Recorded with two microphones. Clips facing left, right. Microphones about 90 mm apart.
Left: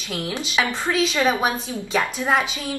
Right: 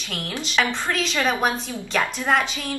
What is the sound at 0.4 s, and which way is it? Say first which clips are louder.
A woman's voice: right 2 dB; 5° left (ahead or behind).